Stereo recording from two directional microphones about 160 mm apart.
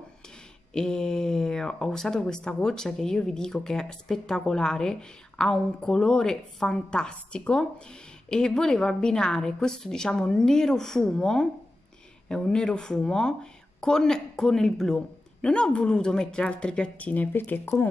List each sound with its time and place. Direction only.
0.7 s a woman's voice: 5° left (ahead or behind)